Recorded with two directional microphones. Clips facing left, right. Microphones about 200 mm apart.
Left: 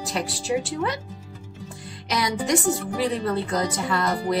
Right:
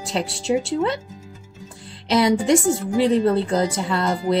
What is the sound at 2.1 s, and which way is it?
A woman's voice, 30° right (ahead or behind).